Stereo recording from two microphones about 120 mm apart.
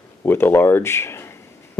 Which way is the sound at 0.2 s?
20° left (ahead or behind).